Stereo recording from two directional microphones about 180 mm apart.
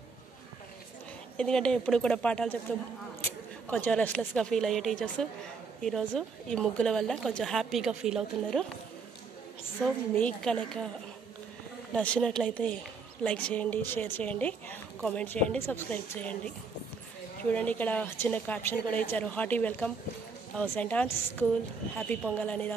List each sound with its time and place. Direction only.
1.3 s a woman's voice: 5° left (ahead or behind)
3.6 s a woman's voice: 10° left (ahead or behind)
9.8 s a woman's voice: 5° left (ahead or behind)
11.9 s a woman's voice: 5° left (ahead or behind)